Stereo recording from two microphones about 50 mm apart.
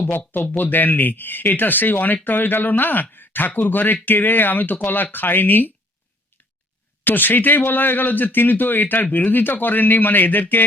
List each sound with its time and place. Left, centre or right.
0.5 s speech: left
7.0 s speech: left